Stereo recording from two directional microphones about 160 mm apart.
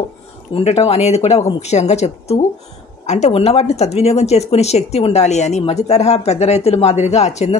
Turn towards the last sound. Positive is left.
turn(degrees=45)  # may be behind; listen again after turning